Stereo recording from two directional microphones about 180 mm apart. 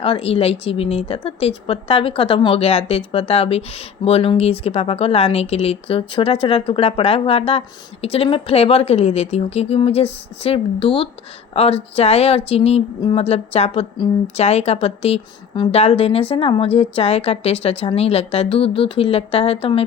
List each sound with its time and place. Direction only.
0.0 s speech: 30° left (ahead or behind)